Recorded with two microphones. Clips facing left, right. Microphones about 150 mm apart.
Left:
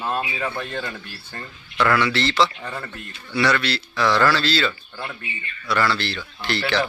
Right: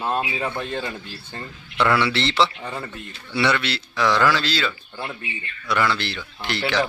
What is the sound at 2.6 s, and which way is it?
A man's voice, 15° right (ahead or behind).